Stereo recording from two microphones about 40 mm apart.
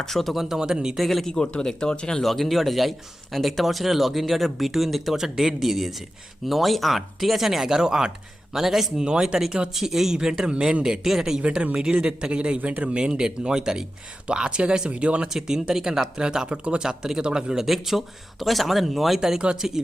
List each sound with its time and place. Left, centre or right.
0.0 s speech: centre
0.3 s speech: centre
1.0 s speech: centre
1.3 s speech: left
2.2 s speech: centre
9.0 s speech: centre
9.7 s speech: centre
11.4 s speech: right
15.3 s speech: centre
16.8 s speech: centre
17.7 s speech: centre